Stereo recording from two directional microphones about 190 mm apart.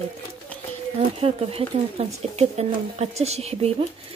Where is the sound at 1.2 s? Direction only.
30° right (ahead or behind).